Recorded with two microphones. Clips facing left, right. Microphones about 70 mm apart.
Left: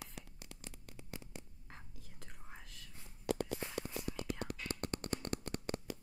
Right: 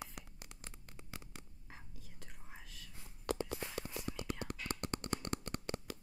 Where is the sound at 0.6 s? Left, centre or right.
Right.